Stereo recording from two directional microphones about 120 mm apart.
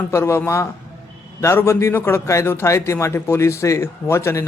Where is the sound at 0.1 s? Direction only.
20° left (ahead or behind).